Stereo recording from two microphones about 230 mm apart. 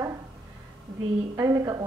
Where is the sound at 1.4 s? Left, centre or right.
Centre.